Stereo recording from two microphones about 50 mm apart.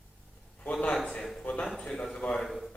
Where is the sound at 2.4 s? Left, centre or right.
Centre.